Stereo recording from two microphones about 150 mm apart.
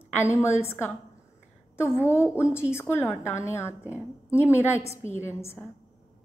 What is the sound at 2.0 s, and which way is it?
A woman's voice, 15° left (ahead or behind).